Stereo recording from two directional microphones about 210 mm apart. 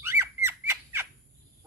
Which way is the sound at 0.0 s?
10° right (ahead or behind).